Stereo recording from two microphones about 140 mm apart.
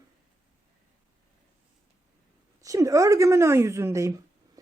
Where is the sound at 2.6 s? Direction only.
25° right (ahead or behind).